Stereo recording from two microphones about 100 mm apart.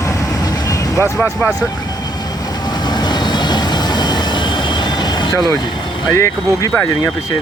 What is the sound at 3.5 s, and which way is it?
Train, 45° left (ahead or behind).